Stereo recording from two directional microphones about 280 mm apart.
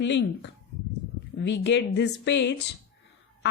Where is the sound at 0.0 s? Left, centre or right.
Left.